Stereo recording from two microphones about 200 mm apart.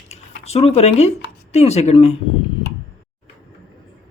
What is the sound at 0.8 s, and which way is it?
Speech, 35° left (ahead or behind).